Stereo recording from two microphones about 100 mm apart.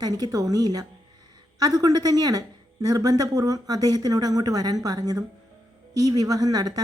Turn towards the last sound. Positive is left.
turn(degrees=-40)  # may be behind; listen again after turning